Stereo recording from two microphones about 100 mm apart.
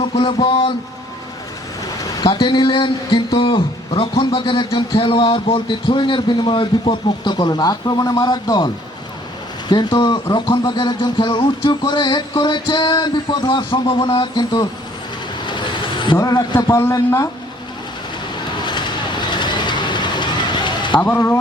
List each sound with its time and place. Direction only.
0.0 s speech: 55° left (ahead or behind)
2.2 s speech: 50° left (ahead or behind)
15.4 s vehicle: 50° left (ahead or behind)
16.1 s a man's voice: 40° left (ahead or behind)
18.6 s vehicle: 50° left (ahead or behind)
21.0 s speech: 20° left (ahead or behind)